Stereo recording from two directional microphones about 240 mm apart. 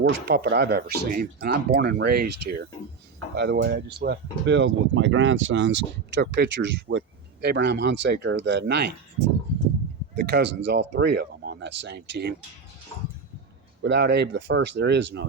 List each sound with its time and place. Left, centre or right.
0.1 s speech: right
13.8 s speech: right